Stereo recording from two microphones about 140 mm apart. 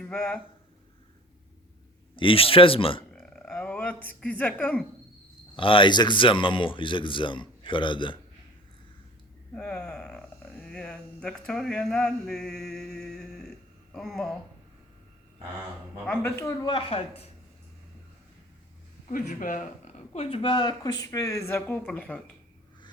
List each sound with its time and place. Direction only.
0.0 s speech: 5° left (ahead or behind)
2.1 s a man's voice: 40° left (ahead or behind)
3.1 s a sound: 5° left (ahead or behind)
5.5 s a man's voice: 40° left (ahead or behind)
9.6 s speech: 5° left (ahead or behind)
16.2 s speech: 20° left (ahead or behind)
16.6 s a man's voice: 40° left (ahead or behind)
19.0 s speech: 70° left (ahead or behind)
20.1 s speech: 40° left (ahead or behind); by 22.2 s 10° left (ahead or behind)